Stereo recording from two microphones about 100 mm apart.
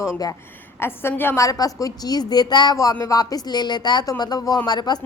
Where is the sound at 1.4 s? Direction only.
35° left (ahead or behind).